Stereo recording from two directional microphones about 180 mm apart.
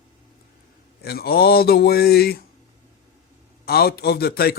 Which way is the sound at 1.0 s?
60° left (ahead or behind).